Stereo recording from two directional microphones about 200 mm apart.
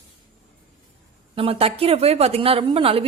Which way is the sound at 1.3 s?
30° right (ahead or behind).